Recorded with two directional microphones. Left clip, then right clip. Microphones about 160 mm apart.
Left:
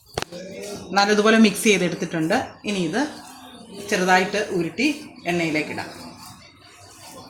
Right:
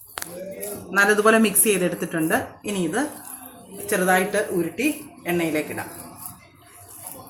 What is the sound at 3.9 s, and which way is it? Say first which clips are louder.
Speech: left 2 dB; 10° left (ahead or behind).